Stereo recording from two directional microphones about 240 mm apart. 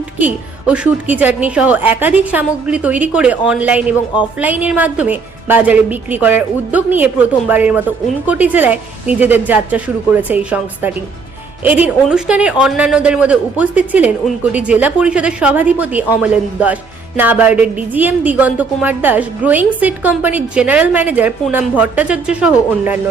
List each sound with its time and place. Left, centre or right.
0.2 s a woman's voice: centre